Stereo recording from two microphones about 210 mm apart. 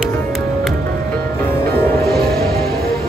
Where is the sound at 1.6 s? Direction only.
45° right (ahead or behind).